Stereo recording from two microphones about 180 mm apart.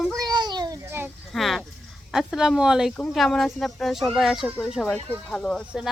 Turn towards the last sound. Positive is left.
turn(degrees=0)  # may be behind; listen again after turning